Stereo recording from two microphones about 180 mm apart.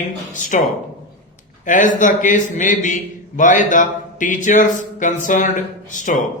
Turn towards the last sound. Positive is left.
turn(degrees=45)  # may be behind; listen again after turning